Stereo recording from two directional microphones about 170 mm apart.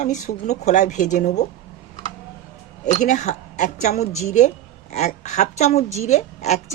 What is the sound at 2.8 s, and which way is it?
A woman's voice, 45° left (ahead or behind).